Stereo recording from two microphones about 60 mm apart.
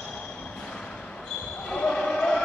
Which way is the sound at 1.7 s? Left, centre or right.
Centre.